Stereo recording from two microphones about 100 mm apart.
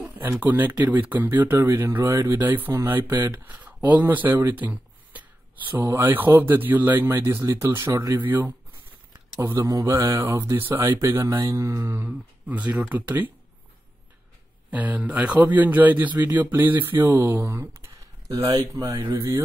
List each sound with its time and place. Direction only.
0.2 s speech: 20° right (ahead or behind)
3.4 s a man's voice: 15° right (ahead or behind)
14.7 s a man's voice: 15° right (ahead or behind)
17.0 s speech: 30° right (ahead or behind)